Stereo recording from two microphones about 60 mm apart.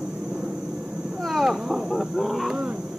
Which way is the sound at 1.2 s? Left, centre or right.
Centre.